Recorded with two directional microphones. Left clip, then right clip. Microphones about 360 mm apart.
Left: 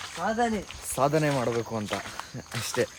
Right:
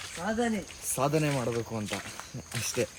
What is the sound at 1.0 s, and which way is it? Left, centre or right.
Speech, centre.